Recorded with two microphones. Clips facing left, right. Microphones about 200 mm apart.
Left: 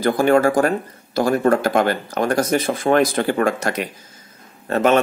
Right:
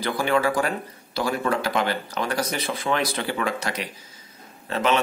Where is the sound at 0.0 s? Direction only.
45° left (ahead or behind).